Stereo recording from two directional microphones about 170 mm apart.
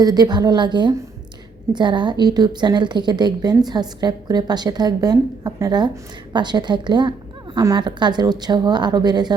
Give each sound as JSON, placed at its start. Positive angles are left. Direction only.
{"t": 0.0, "sound": "a woman's voice", "side_deg": -25}